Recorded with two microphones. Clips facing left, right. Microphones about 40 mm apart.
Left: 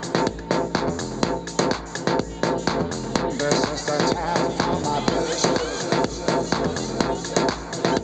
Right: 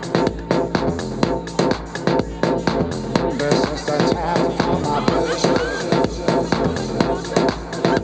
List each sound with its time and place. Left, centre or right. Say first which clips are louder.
0.1 s music: right 4 dB; centre